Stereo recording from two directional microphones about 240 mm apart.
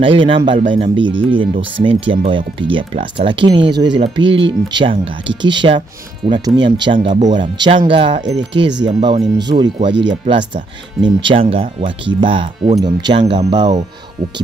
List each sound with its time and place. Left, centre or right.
0.0 s speech: right